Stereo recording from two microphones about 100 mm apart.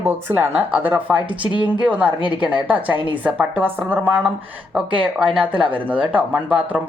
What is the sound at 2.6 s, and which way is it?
Speech, 15° right (ahead or behind).